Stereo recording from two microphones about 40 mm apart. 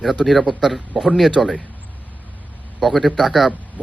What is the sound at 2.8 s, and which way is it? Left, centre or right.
Speech, centre.